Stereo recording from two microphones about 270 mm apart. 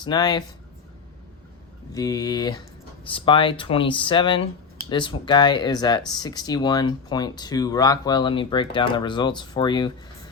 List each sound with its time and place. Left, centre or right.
0.0 s speech: centre
1.9 s speech: centre